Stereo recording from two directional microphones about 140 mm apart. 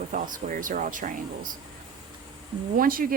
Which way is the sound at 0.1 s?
70° right (ahead or behind).